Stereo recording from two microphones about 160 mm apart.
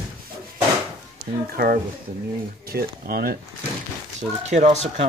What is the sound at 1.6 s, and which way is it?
Speech, 60° right (ahead or behind).